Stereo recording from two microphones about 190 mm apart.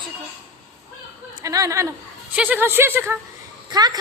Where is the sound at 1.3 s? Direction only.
20° right (ahead or behind).